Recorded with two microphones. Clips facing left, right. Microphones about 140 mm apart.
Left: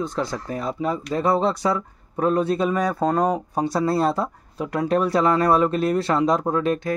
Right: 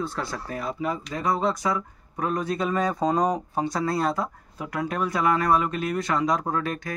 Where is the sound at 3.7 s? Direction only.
25° left (ahead or behind).